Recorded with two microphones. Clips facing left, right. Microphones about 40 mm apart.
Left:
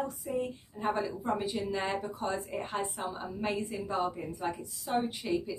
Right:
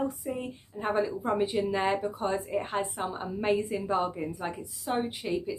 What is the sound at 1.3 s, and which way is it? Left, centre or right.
Speech, right.